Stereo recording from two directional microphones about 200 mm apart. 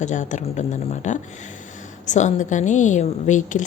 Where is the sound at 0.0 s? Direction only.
40° left (ahead or behind).